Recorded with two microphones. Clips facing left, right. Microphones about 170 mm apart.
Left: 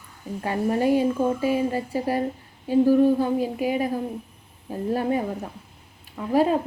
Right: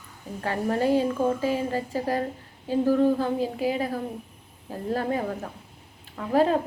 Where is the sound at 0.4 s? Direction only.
15° left (ahead or behind).